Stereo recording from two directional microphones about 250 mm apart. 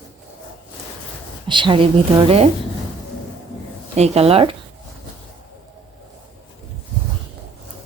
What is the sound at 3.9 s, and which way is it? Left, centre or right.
Speech, right.